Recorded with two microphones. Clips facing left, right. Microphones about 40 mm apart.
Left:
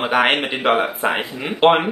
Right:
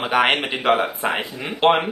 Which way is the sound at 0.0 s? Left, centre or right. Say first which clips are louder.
Left 1 dB; centre.